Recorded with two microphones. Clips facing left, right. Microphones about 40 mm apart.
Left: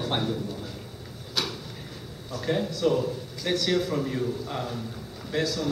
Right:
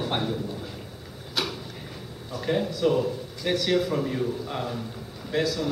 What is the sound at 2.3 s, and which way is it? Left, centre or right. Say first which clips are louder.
Speech: right 1 dB; centre.